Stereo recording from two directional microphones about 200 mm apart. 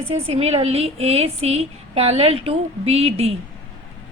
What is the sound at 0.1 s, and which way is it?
Speech, 30° right (ahead or behind).